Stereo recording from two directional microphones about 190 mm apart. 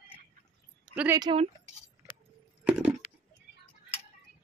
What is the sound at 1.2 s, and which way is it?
Speech, 25° right (ahead or behind).